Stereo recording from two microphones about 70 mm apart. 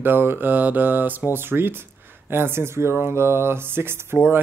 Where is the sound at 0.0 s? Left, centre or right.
Right.